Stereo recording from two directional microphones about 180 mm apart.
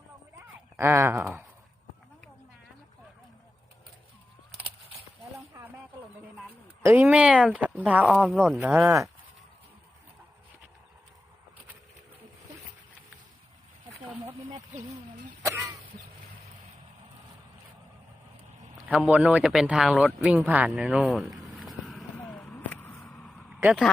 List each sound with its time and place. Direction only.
0.8 s speech: 15° right (ahead or behind)
6.8 s speech: 10° right (ahead or behind)
15.4 s a sound: 15° right (ahead or behind)
18.9 s speech: 5° right (ahead or behind)
20.3 s a sound: 10° right (ahead or behind)
23.6 s speech: 5° right (ahead or behind)